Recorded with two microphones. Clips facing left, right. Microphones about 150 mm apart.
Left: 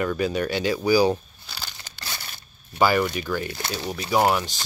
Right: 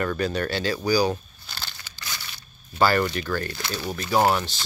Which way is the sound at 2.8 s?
10° left (ahead or behind).